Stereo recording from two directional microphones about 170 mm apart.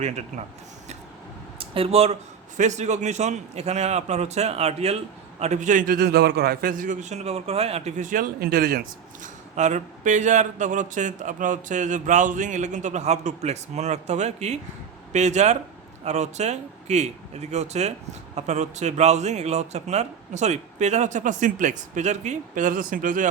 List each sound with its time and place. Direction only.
0.0 s a man's voice: 40° right (ahead or behind)
1.5 s a man's voice: 35° right (ahead or behind); by 8.8 s 65° right (ahead or behind)
9.2 s a man's voice: 45° right (ahead or behind)